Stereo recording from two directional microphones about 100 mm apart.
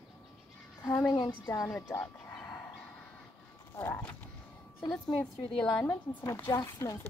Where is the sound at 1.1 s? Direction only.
45° left (ahead or behind).